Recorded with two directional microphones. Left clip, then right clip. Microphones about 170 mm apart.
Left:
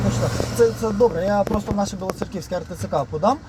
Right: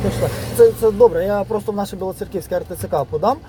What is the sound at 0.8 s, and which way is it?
Speech, 40° right (ahead or behind).